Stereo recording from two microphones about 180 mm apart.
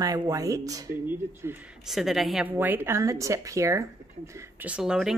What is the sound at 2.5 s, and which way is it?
Speech, 10° right (ahead or behind).